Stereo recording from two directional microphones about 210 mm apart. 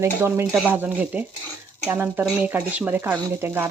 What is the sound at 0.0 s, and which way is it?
Speech, 10° right (ahead or behind).